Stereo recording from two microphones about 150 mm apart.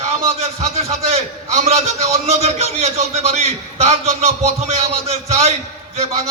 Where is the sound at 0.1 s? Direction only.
45° right (ahead or behind).